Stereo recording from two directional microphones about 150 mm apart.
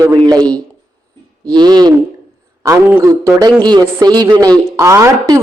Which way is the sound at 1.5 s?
30° right (ahead or behind).